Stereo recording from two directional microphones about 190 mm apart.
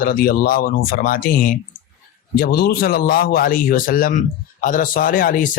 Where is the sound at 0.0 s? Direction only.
50° left (ahead or behind).